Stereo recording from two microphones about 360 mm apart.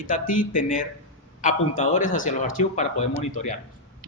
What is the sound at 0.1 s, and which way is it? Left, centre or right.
Speech, left.